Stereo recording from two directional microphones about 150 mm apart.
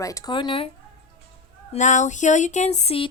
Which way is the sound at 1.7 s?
55° left (ahead or behind).